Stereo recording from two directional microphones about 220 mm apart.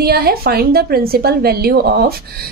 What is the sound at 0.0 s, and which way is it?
A woman's voice, 45° right (ahead or behind).